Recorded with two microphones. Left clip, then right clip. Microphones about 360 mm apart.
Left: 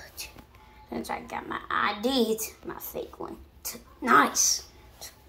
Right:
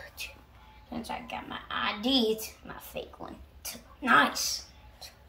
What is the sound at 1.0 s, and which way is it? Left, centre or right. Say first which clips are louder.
Speech: left 3 dB; centre.